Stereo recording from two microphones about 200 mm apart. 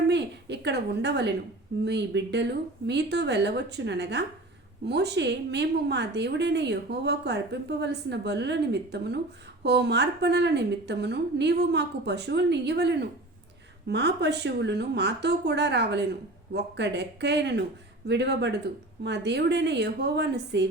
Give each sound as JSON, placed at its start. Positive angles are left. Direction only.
{"t": 0.1, "sound": "a woman's voice", "side_deg": -60}